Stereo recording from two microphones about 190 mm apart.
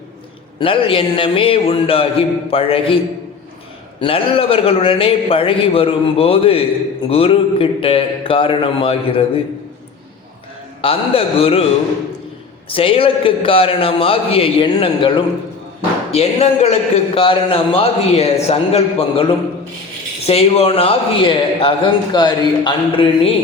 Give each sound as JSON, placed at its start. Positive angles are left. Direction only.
{"t": 0.6, "sound": "a man's voice", "side_deg": 30}
{"t": 4.0, "sound": "a man's voice", "side_deg": 30}
{"t": 10.8, "sound": "a man's voice", "side_deg": 30}
{"t": 12.6, "sound": "a man's voice", "side_deg": 30}